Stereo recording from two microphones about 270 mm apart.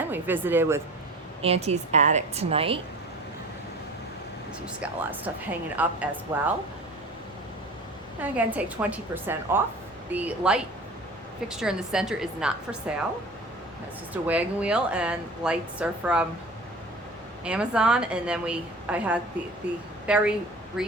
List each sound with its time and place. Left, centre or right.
0.0 s speech: centre
1.4 s a woman's voice: right
4.6 s a woman's voice: centre
8.2 s a woman's voice: centre
14.1 s a woman's voice: centre
17.4 s a woman's voice: centre